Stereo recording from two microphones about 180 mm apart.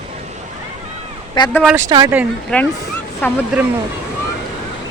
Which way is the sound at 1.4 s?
25° left (ahead or behind).